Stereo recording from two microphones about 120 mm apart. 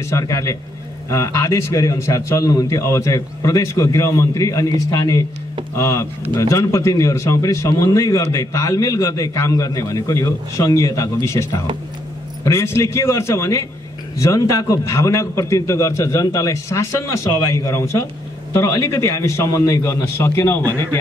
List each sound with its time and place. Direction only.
0.1 s a man's voice: 30° left (ahead or behind)